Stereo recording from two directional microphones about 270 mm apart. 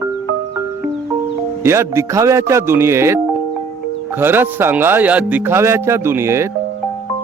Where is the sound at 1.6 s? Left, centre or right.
Centre.